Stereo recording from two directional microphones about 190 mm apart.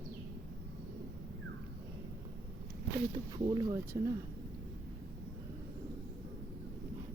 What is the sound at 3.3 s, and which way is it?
Speech, 20° right (ahead or behind).